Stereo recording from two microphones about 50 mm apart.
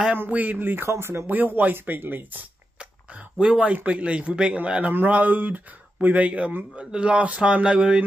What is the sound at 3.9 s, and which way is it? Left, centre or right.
Speech, right.